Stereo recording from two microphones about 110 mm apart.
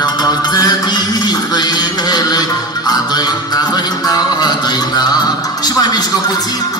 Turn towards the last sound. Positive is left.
turn(degrees=40)  # may be behind; listen again after turning